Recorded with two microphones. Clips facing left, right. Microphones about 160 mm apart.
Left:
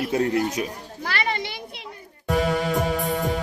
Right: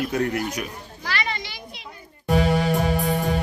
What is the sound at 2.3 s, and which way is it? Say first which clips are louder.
Music: right 2 dB; 75° right (ahead or behind).